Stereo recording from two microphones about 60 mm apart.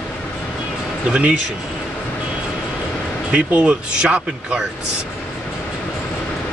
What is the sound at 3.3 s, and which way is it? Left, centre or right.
Speech, centre.